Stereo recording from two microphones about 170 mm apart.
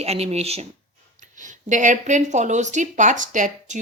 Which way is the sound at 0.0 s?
40° right (ahead or behind).